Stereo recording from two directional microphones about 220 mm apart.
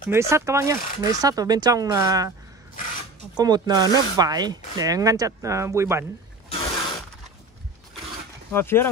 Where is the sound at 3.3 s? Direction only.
20° right (ahead or behind).